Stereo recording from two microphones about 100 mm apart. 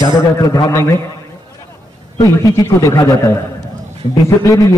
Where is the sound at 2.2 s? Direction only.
35° left (ahead or behind).